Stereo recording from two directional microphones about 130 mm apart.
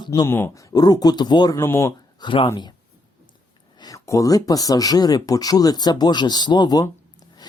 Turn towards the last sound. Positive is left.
turn(degrees=35)  # may be behind; listen again after turning